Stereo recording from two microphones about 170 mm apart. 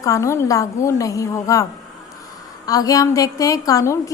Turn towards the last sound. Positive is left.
turn(degrees=20)  # may be behind; listen again after turning